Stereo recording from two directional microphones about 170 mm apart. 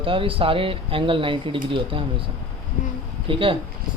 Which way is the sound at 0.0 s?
30° right (ahead or behind).